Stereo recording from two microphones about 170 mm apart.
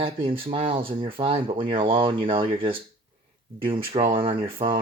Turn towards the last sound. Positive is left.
turn(degrees=-30)  # may be behind; listen again after turning